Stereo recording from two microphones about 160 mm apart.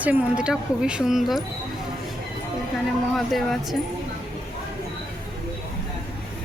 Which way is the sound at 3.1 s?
Centre (ahead or behind).